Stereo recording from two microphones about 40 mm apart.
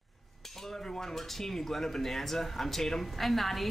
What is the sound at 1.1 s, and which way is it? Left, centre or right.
Speech, centre.